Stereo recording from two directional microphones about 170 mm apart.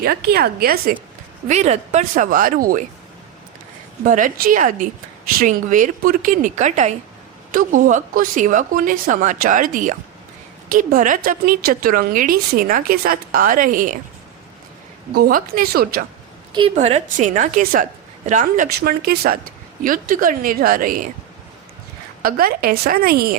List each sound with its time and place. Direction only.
0.0 s a woman's voice: 65° right (ahead or behind)
1.5 s a woman's voice: 40° right (ahead or behind)
4.0 s a woman's voice: 50° right (ahead or behind)
15.1 s a woman's voice: 60° right (ahead or behind)
16.5 s a woman's voice: 30° right (ahead or behind)
16.7 s a woman's voice: 40° right (ahead or behind)
18.8 s a woman's voice: 65° right (ahead or behind)
19.8 s a woman's voice: 50° right (ahead or behind)
22.2 s a woman's voice: 60° right (ahead or behind)